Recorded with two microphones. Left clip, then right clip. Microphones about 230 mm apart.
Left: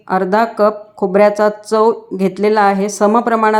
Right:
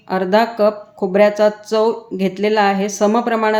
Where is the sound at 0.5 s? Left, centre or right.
Centre.